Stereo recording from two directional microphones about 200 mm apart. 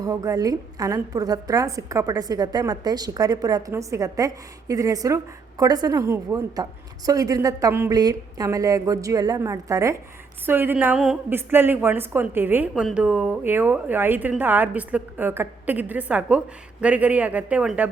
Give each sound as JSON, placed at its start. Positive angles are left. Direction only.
{"t": 0.0, "sound": "a woman's voice", "side_deg": -15}